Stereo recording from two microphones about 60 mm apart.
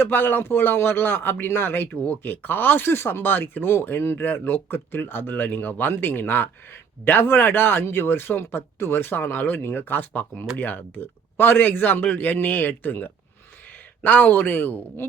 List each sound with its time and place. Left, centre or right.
0.0 s speech: left